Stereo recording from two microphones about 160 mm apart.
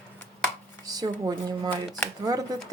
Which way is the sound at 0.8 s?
25° right (ahead or behind).